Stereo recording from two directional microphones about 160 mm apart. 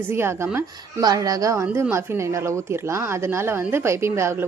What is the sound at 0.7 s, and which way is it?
A woman's voice, 25° right (ahead or behind).